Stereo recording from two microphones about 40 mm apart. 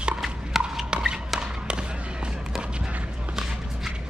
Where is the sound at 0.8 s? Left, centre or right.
Right.